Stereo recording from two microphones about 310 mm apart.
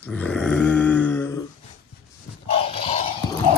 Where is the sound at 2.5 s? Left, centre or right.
Centre.